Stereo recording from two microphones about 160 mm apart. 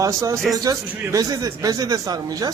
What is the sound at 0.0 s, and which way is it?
A man's voice, 20° right (ahead or behind).